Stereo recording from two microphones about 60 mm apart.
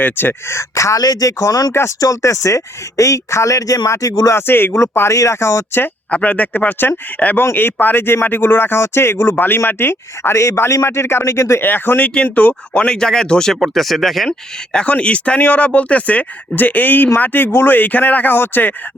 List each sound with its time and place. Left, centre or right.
0.0 s speech: left
0.8 s speech: left
2.0 s speech: left
4.4 s speech: left
4.8 s speech: left
6.1 s speech: left
11.6 s speech: left
12.8 s speech: centre
13.6 s speech: centre
14.3 s speech: centre; by 18.7 s left